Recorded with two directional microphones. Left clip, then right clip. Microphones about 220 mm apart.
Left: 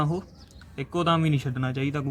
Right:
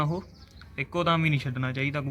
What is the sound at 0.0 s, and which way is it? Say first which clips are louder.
Speech: left 2 dB; centre (ahead or behind).